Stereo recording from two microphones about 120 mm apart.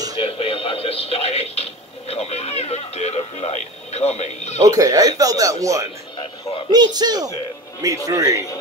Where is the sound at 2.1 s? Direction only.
60° left (ahead or behind).